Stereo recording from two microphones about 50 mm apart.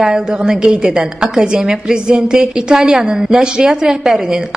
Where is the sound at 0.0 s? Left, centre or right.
Centre.